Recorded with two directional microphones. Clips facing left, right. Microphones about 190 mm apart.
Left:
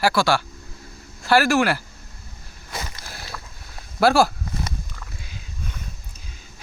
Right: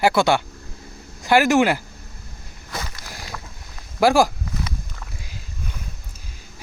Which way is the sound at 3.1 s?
15° right (ahead or behind).